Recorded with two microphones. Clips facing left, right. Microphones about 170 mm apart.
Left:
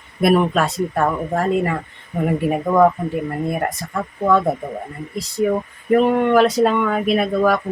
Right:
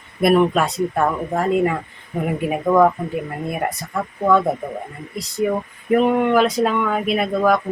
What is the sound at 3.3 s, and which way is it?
Speech, 5° right (ahead or behind).